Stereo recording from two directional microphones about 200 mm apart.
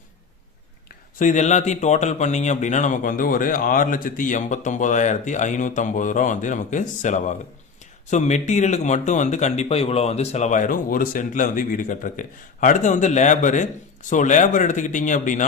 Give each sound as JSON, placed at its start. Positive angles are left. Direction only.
{"t": 1.2, "sound": "a man's voice", "side_deg": 35}